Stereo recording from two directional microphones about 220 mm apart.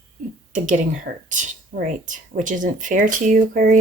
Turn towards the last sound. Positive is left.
turn(degrees=-40)  # may be behind; listen again after turning